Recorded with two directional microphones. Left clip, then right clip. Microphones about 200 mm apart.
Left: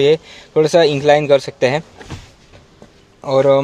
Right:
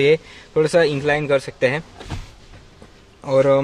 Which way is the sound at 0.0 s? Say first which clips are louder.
Left 3 dB; 20° left (ahead or behind).